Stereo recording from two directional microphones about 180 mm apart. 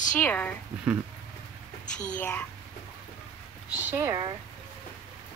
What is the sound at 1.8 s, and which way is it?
Speech, 45° left (ahead or behind).